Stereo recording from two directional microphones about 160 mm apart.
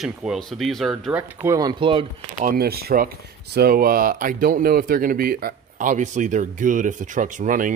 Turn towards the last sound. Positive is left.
turn(degrees=-55)  # may be behind; listen again after turning